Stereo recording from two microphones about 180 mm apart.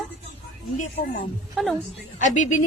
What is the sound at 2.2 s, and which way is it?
Speech, 45° left (ahead or behind).